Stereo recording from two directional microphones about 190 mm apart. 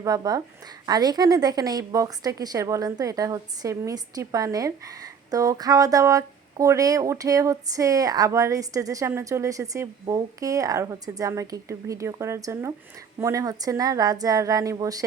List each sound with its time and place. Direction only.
0.0 s a woman's voice: 20° right (ahead or behind)